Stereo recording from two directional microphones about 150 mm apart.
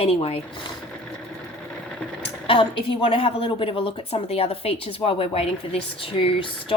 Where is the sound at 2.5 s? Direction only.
35° left (ahead or behind).